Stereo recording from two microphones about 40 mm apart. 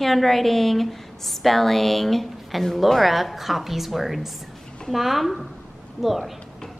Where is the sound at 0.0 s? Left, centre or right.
Centre.